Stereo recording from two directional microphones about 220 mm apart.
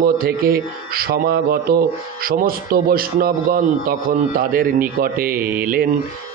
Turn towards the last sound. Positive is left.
turn(degrees=-40)  # may be behind; listen again after turning